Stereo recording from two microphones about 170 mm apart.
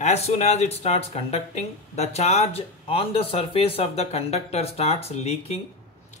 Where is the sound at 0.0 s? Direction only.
40° left (ahead or behind).